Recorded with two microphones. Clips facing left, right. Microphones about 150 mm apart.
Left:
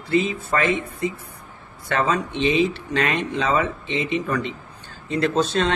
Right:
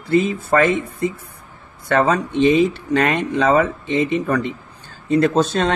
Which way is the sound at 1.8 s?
40° right (ahead or behind).